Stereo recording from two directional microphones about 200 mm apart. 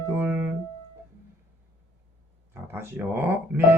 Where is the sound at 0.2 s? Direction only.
10° right (ahead or behind).